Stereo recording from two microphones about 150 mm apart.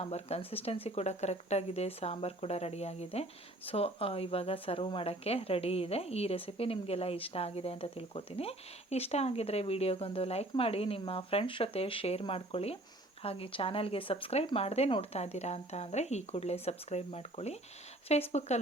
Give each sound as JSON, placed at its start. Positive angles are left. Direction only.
{"t": 0.0, "sound": "speech", "side_deg": 45}